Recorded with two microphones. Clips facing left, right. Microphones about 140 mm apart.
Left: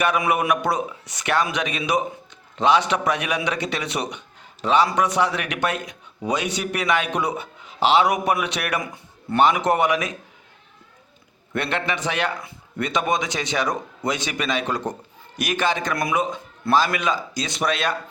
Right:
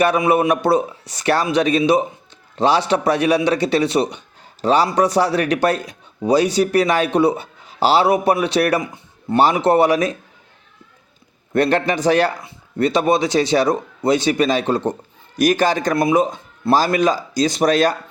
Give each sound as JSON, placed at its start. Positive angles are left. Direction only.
{"t": 0.0, "sound": "a man's voice", "side_deg": -35}
{"t": 11.5, "sound": "a man's voice", "side_deg": -40}